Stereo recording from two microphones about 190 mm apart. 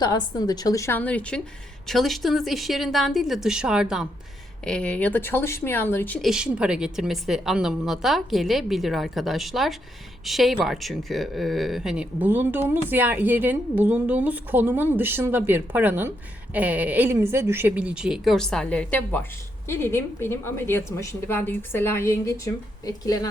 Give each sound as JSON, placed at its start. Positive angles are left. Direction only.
{"t": 0.0, "sound": "a woman's voice", "side_deg": 20}